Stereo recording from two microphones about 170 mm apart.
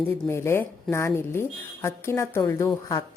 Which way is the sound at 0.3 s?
15° left (ahead or behind).